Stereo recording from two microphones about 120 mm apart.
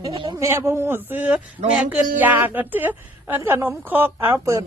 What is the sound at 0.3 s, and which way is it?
A woman's voice, 25° right (ahead or behind).